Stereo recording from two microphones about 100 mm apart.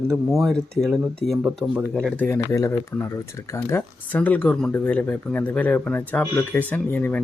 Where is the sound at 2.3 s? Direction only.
30° left (ahead or behind).